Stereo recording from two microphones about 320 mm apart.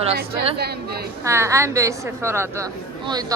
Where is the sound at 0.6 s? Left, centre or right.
Right.